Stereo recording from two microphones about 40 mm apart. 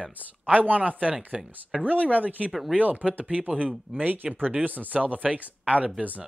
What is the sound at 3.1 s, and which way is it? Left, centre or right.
Speech, right.